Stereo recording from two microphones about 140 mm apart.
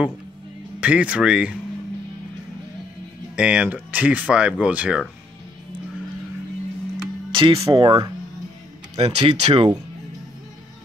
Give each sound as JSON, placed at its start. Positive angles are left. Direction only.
{"t": 0.7, "sound": "speech", "side_deg": -10}
{"t": 3.3, "sound": "speech", "side_deg": -10}
{"t": 7.5, "sound": "speech", "side_deg": -25}
{"t": 7.8, "sound": "speech", "side_deg": -35}
{"t": 8.9, "sound": "speech", "side_deg": -45}